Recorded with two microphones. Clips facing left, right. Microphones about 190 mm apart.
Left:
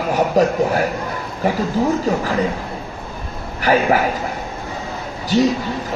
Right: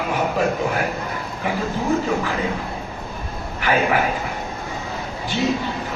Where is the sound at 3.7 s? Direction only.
40° left (ahead or behind).